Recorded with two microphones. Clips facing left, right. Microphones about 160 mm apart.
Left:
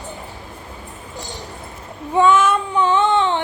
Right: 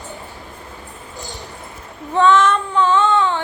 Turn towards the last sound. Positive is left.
turn(degrees=20)  # may be behind; listen again after turning